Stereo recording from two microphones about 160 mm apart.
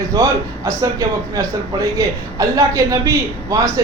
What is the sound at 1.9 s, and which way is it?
A man's voice, 20° right (ahead or behind).